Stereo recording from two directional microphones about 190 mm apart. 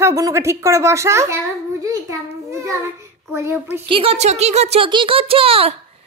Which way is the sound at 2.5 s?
15° right (ahead or behind).